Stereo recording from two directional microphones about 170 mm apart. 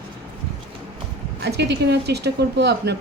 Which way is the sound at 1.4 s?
80° right.